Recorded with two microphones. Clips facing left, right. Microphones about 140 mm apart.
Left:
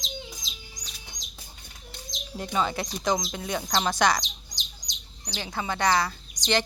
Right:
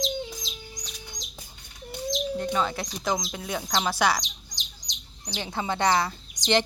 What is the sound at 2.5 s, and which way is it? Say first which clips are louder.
Speech: even; centre (ahead or behind).